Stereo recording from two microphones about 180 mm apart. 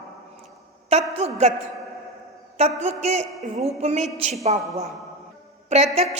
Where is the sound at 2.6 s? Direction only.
35° right (ahead or behind).